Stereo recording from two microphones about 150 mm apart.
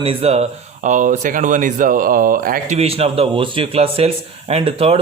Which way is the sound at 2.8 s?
40° right (ahead or behind).